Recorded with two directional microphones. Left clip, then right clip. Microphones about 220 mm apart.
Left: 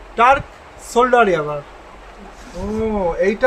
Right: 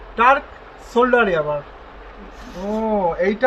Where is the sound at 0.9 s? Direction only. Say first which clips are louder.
Left 2 dB; 30° left (ahead or behind).